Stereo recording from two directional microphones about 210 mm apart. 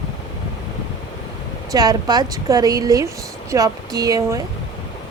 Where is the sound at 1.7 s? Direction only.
20° right (ahead or behind).